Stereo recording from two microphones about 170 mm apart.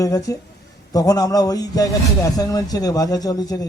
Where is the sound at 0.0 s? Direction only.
20° left (ahead or behind).